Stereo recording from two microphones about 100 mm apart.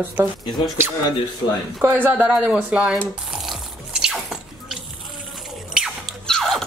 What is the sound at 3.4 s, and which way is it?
Biting, 5° right (ahead or behind).